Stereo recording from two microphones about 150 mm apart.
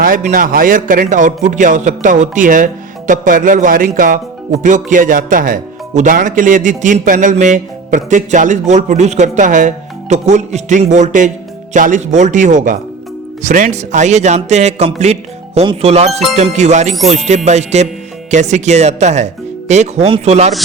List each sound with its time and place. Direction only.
0.0 s speech: 60° right (ahead or behind)
1.0 s speech: 55° right (ahead or behind)